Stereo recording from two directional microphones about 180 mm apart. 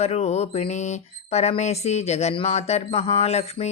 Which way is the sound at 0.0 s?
35° left (ahead or behind).